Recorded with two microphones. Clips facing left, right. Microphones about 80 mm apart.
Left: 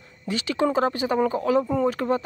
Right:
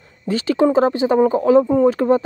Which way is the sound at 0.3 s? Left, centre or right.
Right.